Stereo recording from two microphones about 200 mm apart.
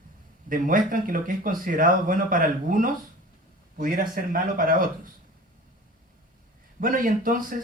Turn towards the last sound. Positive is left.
turn(degrees=-45)  # may be behind; listen again after turning